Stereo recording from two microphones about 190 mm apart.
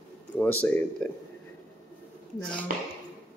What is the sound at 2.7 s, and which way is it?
Speech, 45° right (ahead or behind).